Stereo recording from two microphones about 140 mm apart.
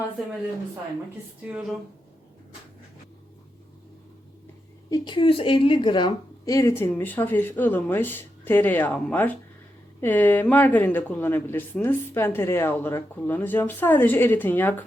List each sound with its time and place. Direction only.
1.5 s a woman's voice: 10° right (ahead or behind)
4.9 s a woman's voice: 30° left (ahead or behind)
6.4 s speech: 25° left (ahead or behind)